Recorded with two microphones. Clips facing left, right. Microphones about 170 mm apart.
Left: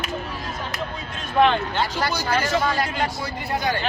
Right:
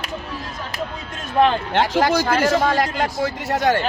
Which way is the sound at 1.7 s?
85° right.